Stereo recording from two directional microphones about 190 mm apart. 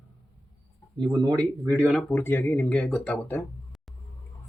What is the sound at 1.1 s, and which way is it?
Speech, 20° right (ahead or behind).